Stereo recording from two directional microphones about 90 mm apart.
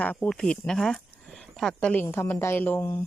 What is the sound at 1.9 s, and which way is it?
A woman's voice, 25° left (ahead or behind).